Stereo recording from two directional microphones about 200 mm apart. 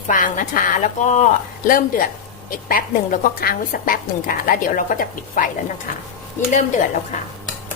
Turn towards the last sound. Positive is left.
turn(degrees=40)  # may be behind; listen again after turning